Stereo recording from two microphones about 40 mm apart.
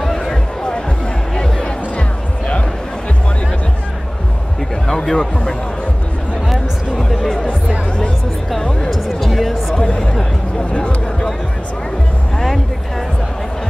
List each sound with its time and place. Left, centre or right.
0.0 s music: centre
1.3 s music: centre
4.8 s a sound: centre
7.0 s chatter: centre
8.9 s music: centre
9.8 s chatter: centre
10.7 s a sound: left